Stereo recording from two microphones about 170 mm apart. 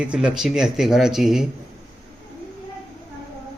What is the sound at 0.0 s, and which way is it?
Speech, 5° right (ahead or behind).